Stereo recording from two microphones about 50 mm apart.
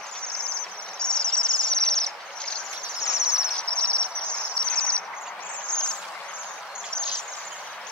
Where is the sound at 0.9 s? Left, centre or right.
Centre.